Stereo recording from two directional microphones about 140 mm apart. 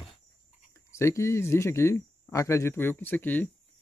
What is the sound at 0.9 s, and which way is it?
Speech, 20° left (ahead or behind).